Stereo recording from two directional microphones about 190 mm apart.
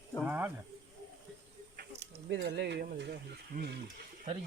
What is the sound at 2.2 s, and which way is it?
Speech, 70° right (ahead or behind).